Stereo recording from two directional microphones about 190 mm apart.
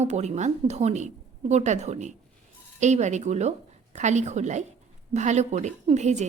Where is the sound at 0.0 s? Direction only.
35° right (ahead or behind).